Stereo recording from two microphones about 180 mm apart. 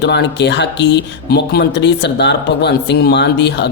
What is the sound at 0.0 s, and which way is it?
Speech, 75° left (ahead or behind).